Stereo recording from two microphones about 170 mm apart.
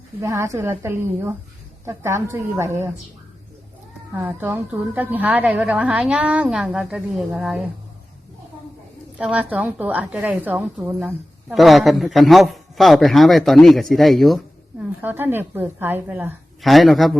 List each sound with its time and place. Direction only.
0.2 s a woman's voice: 15° right (ahead or behind)
4.1 s a woman's voice: 10° right (ahead or behind)
9.1 s a woman's voice: 10° right (ahead or behind)
15.0 s a woman's voice: 10° right (ahead or behind)
16.6 s a woman's voice: centre (ahead or behind)